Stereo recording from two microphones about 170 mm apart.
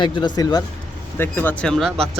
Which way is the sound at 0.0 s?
25° left (ahead or behind).